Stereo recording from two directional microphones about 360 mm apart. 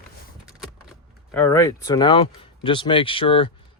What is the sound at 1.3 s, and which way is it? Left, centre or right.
Speech, centre.